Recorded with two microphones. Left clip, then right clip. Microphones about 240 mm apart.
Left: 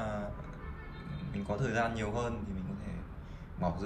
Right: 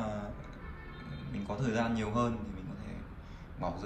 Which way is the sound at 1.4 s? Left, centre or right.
Centre.